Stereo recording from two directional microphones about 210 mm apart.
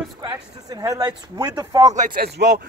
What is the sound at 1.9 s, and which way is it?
Speech, 45° right (ahead or behind).